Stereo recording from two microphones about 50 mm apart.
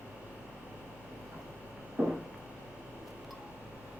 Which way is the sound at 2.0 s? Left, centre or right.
Right.